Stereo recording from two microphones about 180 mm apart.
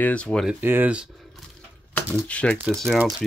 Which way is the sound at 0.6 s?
10° right (ahead or behind).